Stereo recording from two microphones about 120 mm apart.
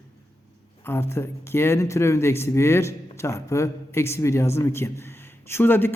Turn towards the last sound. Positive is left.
turn(degrees=15)  # may be behind; listen again after turning